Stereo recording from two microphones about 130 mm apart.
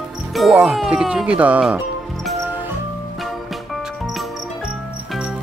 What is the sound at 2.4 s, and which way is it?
Music, 15° right (ahead or behind).